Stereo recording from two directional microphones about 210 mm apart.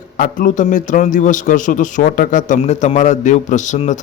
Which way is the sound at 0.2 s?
40° left (ahead or behind).